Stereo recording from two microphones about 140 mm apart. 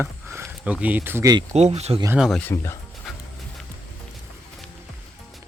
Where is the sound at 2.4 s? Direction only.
15° left (ahead or behind).